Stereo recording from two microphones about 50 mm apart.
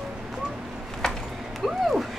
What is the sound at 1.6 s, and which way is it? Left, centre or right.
Speech, centre.